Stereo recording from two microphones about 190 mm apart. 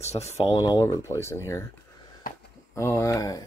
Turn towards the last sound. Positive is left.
turn(degrees=20)  # may be behind; listen again after turning